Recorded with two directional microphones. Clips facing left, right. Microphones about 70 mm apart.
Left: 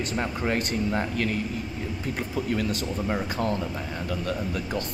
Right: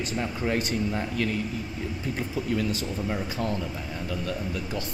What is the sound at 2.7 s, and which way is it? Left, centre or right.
Speech, left.